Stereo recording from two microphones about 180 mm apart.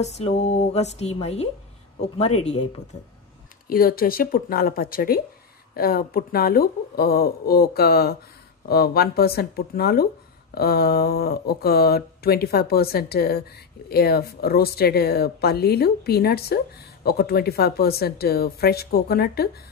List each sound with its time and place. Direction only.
0.0 s speech: 35° left (ahead or behind)
3.6 s speech: 55° left (ahead or behind)